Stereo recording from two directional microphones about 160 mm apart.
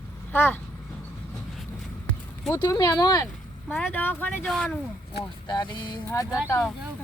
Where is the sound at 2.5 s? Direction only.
20° left (ahead or behind).